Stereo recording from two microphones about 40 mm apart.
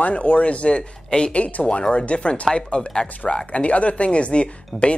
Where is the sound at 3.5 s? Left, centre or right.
Left.